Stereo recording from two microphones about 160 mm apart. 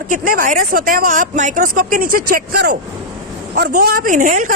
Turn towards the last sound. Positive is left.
turn(degrees=-55)  # may be behind; listen again after turning